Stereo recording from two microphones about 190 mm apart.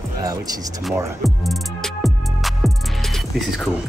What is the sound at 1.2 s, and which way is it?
Music, centre (ahead or behind).